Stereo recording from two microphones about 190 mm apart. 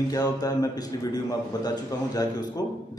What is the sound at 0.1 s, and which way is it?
A man's voice, 20° left (ahead or behind).